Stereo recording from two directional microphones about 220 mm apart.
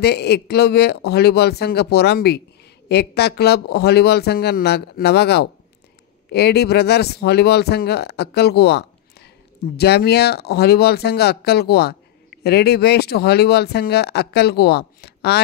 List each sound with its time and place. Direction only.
0.0 s speech: 50° left (ahead or behind)